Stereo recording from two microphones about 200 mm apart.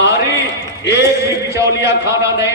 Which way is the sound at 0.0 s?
60° left (ahead or behind).